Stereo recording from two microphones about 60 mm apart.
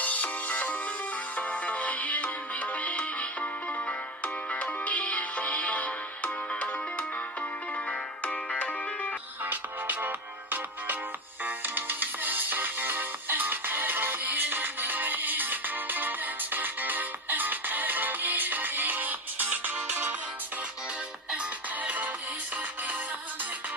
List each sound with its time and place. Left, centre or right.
0.0 s music: left
9.4 s music: right
21.8 s music: right